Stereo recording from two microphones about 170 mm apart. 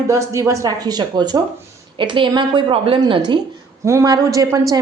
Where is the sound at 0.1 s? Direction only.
20° right (ahead or behind).